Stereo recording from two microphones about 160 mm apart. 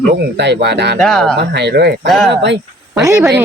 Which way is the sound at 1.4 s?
90° right.